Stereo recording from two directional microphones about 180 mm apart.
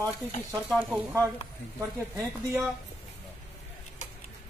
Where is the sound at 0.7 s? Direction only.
Centre (ahead or behind).